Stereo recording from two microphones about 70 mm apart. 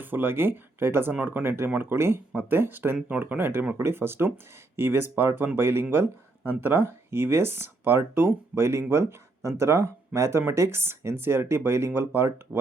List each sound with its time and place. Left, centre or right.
0.0 s speech: right